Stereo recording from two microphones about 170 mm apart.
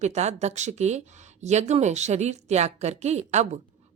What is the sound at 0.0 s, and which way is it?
A woman's voice, 40° right (ahead or behind).